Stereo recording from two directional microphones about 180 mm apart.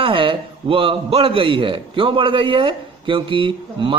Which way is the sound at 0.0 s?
30° right (ahead or behind).